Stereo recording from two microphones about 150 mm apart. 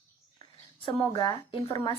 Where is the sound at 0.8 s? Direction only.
30° left (ahead or behind).